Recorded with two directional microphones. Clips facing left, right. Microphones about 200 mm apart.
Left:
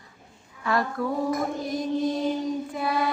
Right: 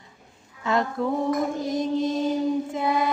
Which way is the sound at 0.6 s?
20° right (ahead or behind).